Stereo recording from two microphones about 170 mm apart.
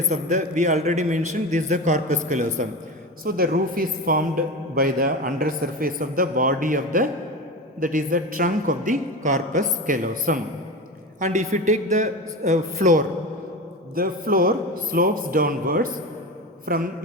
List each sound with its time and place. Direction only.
0.1 s a man's voice: 45° right (ahead or behind)
3.2 s a man's voice: 60° right (ahead or behind)